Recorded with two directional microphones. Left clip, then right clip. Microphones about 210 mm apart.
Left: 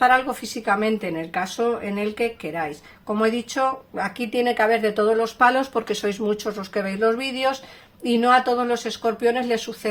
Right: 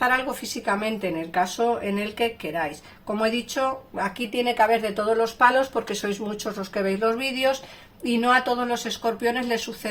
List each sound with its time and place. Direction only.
0.5 s speech: 40° left (ahead or behind)